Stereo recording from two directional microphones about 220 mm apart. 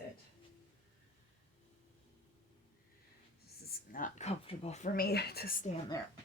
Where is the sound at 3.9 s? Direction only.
35° left (ahead or behind).